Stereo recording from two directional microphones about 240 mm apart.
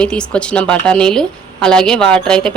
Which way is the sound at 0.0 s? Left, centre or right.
Centre.